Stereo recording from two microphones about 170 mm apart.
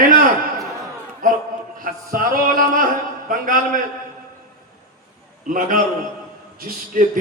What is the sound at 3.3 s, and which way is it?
Speech, 50° right (ahead or behind).